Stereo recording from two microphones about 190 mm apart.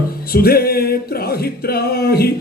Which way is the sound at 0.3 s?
55° left (ahead or behind).